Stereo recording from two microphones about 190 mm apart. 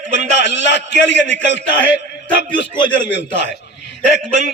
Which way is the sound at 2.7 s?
25° left (ahead or behind).